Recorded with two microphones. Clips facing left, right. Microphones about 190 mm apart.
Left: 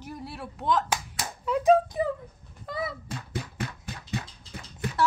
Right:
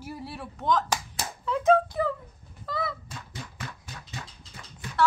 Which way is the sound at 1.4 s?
15° left (ahead or behind).